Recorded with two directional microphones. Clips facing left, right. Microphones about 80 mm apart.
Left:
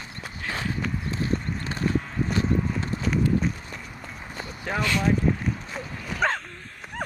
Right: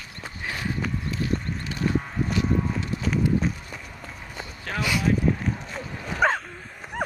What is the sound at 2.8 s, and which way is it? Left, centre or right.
Clip-clop, left.